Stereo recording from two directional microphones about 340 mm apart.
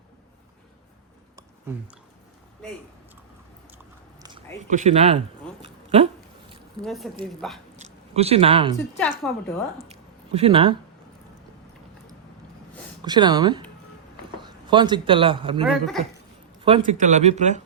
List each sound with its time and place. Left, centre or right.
4.7 s speech: right
5.6 s a sound: centre
6.8 s a woman's voice: centre
7.8 s a sound: centre
9.0 s a woman's voice: centre
9.9 s a sound: centre
13.0 s a man's voice: centre
15.6 s a woman's voice: centre
16.6 s speech: centre